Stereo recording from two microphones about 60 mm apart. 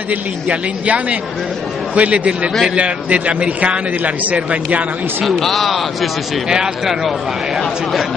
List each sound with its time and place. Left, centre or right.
0.1 s a man's voice: right
5.3 s speech: centre